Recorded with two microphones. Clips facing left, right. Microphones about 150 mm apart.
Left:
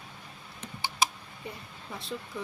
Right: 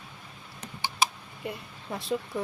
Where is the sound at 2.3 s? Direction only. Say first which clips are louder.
Right 4 dB; 50° right (ahead or behind).